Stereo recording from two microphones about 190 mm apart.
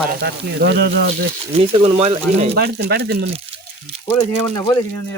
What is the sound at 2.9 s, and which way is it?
Speech, 60° right (ahead or behind).